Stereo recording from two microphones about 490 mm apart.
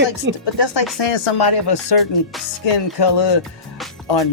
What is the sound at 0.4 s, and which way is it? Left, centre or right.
Speech, left.